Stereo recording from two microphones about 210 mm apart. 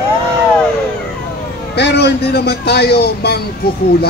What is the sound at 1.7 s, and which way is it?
A man's voice, 55° left (ahead or behind).